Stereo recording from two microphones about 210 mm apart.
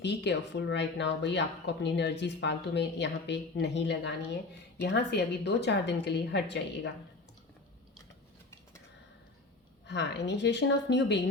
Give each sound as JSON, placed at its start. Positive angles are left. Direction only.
{"t": 0.0, "sound": "speech", "side_deg": 55}
{"t": 9.8, "sound": "speech", "side_deg": 55}